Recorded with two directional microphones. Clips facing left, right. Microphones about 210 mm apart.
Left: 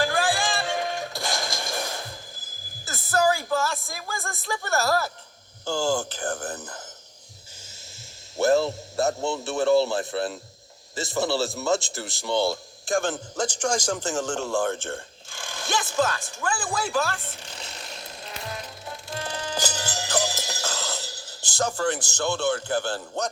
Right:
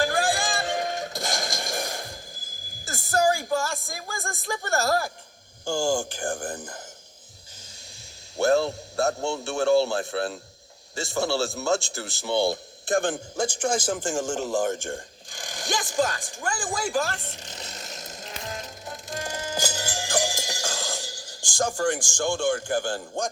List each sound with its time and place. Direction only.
0.3 s music: 50° right (ahead or behind)
0.7 s music: 20° right (ahead or behind)
4.7 s speech: 15° right (ahead or behind)
8.4 s a man's voice: centre (ahead or behind); by 17.9 s 20° right (ahead or behind)
17.9 s music: 45° right (ahead or behind)
19.2 s music: 10° right (ahead or behind)